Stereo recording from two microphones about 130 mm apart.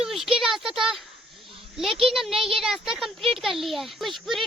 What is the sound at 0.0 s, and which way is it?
Speech, 5° right (ahead or behind).